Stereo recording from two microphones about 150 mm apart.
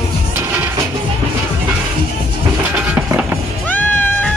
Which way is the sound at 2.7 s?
10° right (ahead or behind).